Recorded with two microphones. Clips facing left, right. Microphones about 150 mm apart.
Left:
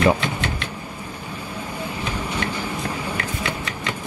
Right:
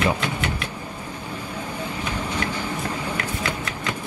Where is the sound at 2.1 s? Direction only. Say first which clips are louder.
Even; 10° left (ahead or behind).